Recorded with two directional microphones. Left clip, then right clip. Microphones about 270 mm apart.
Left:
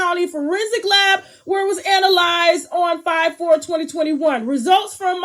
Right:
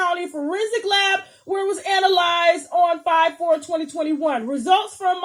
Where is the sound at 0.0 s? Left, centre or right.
Left.